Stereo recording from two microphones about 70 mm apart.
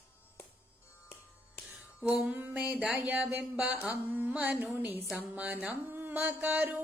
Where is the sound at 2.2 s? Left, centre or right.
Right.